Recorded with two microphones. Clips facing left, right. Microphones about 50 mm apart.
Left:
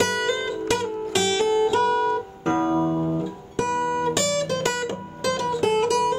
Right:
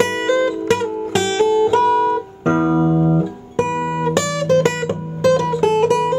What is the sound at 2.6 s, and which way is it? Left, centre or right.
Music, centre.